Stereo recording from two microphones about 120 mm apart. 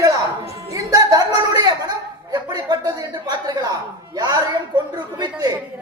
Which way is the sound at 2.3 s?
35° right (ahead or behind).